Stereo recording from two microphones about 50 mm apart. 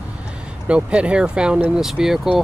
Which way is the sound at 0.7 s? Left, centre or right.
Right.